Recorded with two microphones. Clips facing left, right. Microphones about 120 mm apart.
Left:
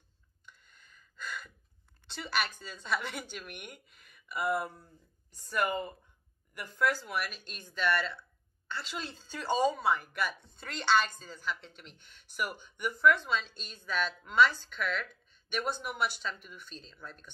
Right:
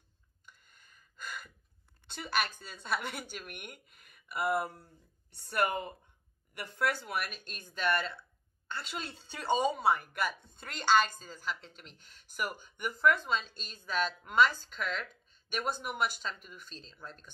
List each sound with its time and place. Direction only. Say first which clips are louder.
0.5 s gasp: left 2 dB; 45° right (ahead or behind)
2.0 s speech: even; 50° right (ahead or behind)
5.3 s speech: even; 65° right (ahead or behind); by 17.3 s 35° right (ahead or behind)